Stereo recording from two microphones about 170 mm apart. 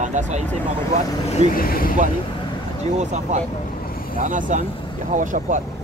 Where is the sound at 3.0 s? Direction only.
45° right (ahead or behind).